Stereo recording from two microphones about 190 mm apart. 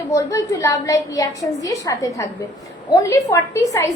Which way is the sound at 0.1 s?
15° left (ahead or behind).